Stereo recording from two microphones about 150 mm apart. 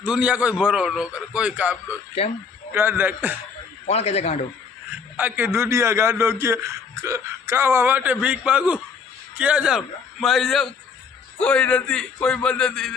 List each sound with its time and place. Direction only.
0.0 s a man's voice: 10° right (ahead or behind)
3.8 s a man's voice: 45° left (ahead or behind)
5.1 s a man's voice: 10° right (ahead or behind)